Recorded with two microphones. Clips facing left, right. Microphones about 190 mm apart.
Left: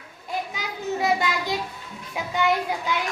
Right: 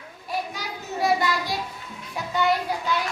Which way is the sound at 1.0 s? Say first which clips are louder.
Right 2 dB; 20° left (ahead or behind).